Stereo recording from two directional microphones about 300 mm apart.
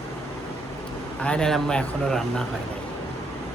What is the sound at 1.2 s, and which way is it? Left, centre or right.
Speech, centre.